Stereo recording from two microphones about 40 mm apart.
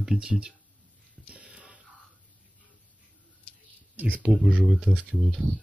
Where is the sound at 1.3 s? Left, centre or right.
Right.